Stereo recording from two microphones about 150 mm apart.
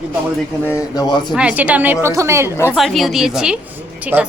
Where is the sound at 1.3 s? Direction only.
10° right (ahead or behind).